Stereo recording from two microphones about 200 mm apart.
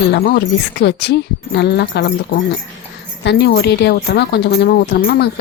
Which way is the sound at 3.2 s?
60° left (ahead or behind).